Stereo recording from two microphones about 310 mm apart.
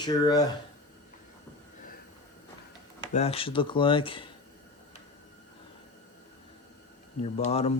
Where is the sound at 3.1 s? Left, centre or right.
Centre.